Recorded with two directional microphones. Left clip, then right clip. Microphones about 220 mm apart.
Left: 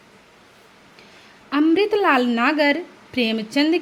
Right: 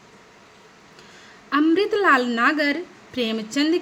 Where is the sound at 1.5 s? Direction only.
15° left (ahead or behind).